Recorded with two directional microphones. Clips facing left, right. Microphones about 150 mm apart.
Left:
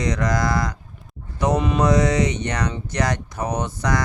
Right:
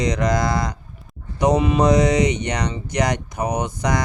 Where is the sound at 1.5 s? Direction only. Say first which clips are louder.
Right 3 dB; centre (ahead or behind).